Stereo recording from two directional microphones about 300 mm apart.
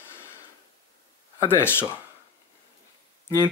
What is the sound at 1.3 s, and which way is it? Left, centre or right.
Speech, centre.